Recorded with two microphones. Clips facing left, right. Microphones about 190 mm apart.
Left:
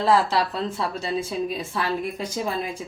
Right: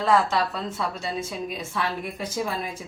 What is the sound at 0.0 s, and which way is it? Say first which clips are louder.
Speech: left 1 dB; 35° left (ahead or behind).